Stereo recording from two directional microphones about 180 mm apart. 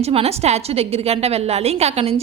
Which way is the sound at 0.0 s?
35° right (ahead or behind).